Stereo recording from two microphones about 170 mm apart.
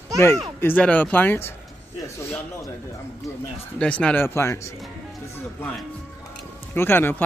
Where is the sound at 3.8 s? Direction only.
5° left (ahead or behind).